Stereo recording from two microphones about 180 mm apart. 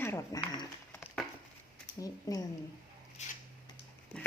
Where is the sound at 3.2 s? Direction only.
40° left (ahead or behind).